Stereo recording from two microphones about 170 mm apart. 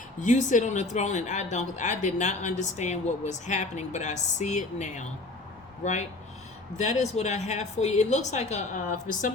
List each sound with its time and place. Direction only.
0.2 s speech: 45° left (ahead or behind)